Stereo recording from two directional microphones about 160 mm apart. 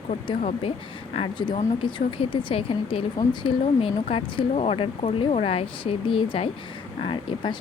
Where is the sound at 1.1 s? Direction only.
35° left (ahead or behind).